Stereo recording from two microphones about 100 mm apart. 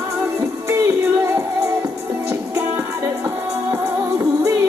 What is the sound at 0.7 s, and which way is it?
Music, 25° right (ahead or behind).